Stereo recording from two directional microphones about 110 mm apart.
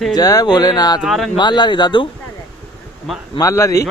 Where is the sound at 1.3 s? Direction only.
40° left (ahead or behind).